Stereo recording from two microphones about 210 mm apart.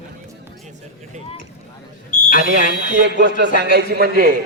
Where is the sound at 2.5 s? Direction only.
55° right (ahead or behind).